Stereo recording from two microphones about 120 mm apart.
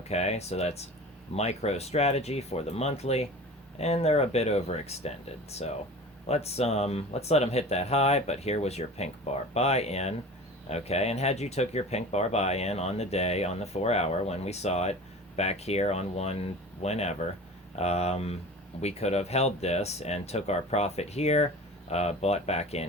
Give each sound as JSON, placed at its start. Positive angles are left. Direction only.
{"t": 0.1, "sound": "speech", "side_deg": 65}